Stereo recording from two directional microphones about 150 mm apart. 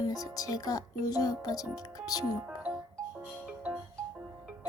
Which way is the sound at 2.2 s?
10° right (ahead or behind).